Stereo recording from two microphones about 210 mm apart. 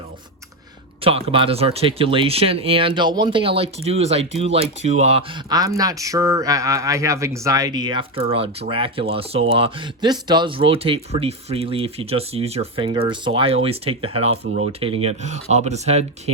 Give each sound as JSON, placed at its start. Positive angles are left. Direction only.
{"t": 1.0, "sound": "speech", "side_deg": -25}